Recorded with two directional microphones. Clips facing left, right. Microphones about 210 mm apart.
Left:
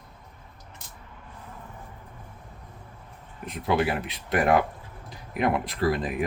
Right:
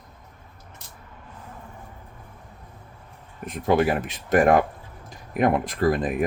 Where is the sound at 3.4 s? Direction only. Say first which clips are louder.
Right 4 dB; 45° right (ahead or behind).